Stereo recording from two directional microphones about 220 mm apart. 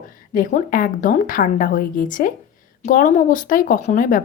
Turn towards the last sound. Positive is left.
turn(degrees=35)  # may be behind; listen again after turning